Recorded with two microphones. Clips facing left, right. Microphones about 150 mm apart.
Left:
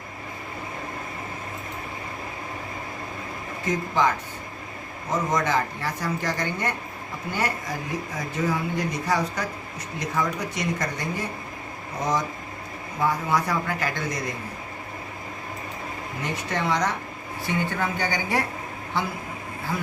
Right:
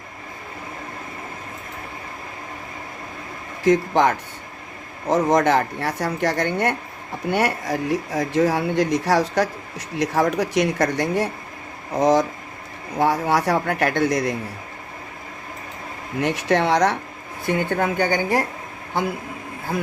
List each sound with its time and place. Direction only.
3.6 s speech: 75° right (ahead or behind)
11.9 s speech: 90° right
13.0 s speech: 75° right (ahead or behind)
16.2 s speech: 75° right (ahead or behind)
17.4 s speech: 55° right (ahead or behind)